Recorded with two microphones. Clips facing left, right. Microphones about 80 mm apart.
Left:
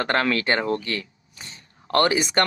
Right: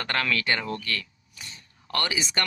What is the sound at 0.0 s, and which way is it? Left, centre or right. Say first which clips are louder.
Speech: left 5 dB; left.